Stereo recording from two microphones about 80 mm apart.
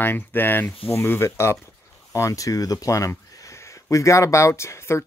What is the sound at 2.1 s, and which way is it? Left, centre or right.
Speech, left.